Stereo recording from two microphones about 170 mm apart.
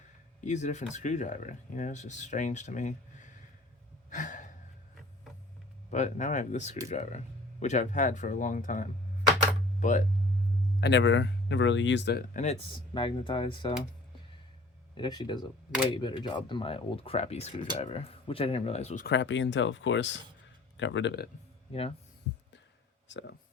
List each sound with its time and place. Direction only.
0.4 s speech: 45° left (ahead or behind)
4.1 s a sound: 50° left (ahead or behind)
5.9 s speech: 45° left (ahead or behind)
10.8 s speech: 85° left; by 12.5 s 45° left (ahead or behind)
12.9 s speech: 30° left (ahead or behind)
14.9 s speech: 25° left (ahead or behind)
19.0 s speech: 90° left
21.7 s speech: 35° left (ahead or behind)
23.0 s speech: 90° left